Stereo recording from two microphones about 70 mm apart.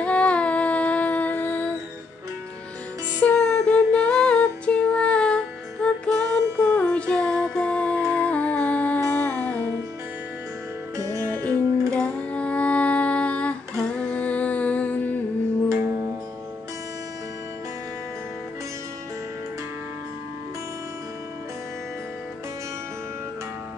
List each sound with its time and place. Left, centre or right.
0.0 s humming: centre
3.4 s music: centre
11.0 s music: right
11.9 s music: centre